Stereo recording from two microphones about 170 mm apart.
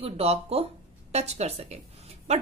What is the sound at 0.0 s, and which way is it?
A woman's voice, 35° right (ahead or behind).